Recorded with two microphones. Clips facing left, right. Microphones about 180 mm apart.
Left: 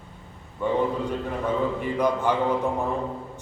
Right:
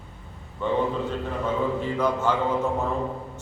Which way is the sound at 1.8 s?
15° left (ahead or behind).